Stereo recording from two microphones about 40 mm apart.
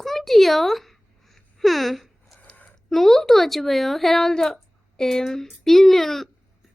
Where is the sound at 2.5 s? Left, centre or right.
Left.